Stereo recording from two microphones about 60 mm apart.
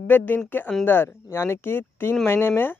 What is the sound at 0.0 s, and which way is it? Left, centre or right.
Speech, left.